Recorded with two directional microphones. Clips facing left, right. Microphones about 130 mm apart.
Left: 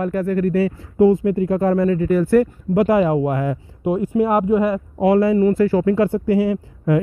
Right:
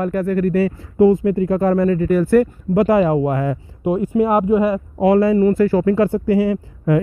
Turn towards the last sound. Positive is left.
turn(degrees=-55)  # may be behind; listen again after turning